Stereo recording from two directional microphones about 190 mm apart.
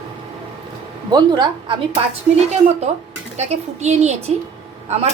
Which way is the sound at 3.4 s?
35° right (ahead or behind).